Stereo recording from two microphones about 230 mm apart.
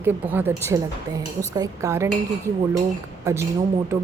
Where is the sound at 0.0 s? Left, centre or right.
Centre.